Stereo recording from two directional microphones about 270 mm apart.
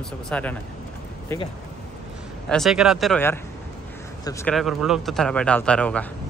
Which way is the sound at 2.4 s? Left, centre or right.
Centre.